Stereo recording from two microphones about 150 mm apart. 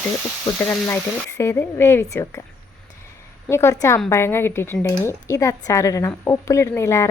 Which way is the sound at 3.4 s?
20° left (ahead or behind).